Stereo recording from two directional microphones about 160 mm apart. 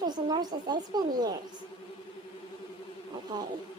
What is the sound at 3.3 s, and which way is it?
Speech, 25° right (ahead or behind).